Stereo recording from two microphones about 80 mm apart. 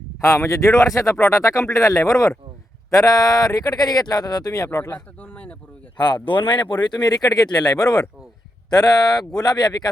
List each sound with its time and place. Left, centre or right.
0.2 s speech: left
5.2 s a sound: centre
6.0 s speech: left